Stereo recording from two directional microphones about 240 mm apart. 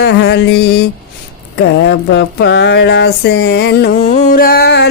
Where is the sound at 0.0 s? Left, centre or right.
Left.